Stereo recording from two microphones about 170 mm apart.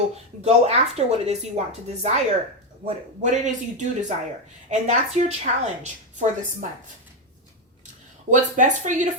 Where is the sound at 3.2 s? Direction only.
45° right (ahead or behind).